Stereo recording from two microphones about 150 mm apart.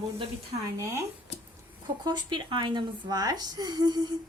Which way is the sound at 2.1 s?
30° right (ahead or behind).